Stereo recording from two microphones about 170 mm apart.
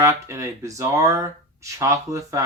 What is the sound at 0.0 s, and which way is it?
Speech, 15° right (ahead or behind).